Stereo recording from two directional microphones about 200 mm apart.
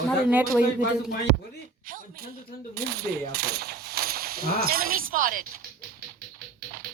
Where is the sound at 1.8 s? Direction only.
45° right (ahead or behind).